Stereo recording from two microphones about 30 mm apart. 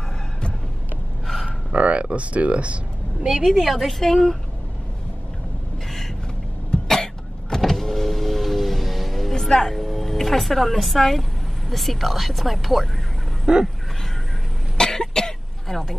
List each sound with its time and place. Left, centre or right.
1.7 s speech: right
3.4 s speech: centre
4.0 s speech: centre
6.7 s cough: left
7.4 s power windows: centre
9.6 s speech: centre
13.5 s speech: right
14.8 s cough: centre